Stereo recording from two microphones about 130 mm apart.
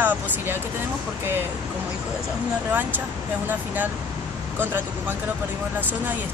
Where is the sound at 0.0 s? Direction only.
15° right (ahead or behind).